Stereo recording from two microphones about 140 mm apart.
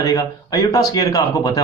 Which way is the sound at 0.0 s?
25° left (ahead or behind).